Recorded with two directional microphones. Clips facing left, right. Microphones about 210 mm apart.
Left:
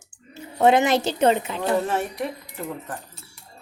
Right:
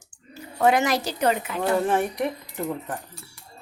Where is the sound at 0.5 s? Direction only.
20° left (ahead or behind).